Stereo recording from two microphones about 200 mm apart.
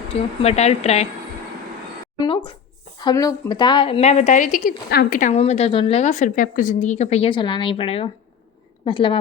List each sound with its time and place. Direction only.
0.1 s a woman's voice: 30° left (ahead or behind)
2.1 s a woman's voice: 25° left (ahead or behind); by 5.3 s 45° left (ahead or behind)
5.3 s a woman's voice: 30° left (ahead or behind)